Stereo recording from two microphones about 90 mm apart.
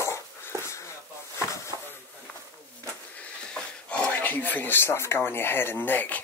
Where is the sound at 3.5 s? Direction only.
10° left (ahead or behind).